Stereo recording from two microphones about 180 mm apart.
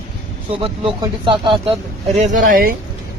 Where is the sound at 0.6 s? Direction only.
30° right (ahead or behind).